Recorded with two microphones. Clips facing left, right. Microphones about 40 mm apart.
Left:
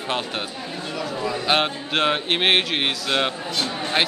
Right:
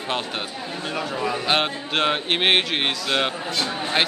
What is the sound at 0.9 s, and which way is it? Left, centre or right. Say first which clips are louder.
Speech: right 1 dB; right.